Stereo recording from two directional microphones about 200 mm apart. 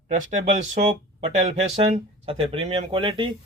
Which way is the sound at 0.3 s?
35° right (ahead or behind).